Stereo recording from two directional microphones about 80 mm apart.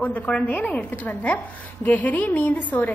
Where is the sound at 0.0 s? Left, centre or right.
Centre.